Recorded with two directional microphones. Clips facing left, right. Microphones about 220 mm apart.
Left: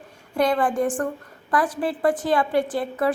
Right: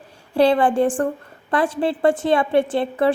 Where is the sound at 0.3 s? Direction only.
30° right (ahead or behind).